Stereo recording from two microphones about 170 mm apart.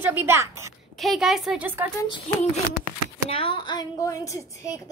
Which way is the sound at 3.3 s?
30° left (ahead or behind).